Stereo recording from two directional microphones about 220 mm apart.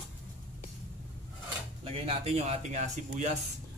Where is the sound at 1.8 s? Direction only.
25° right (ahead or behind).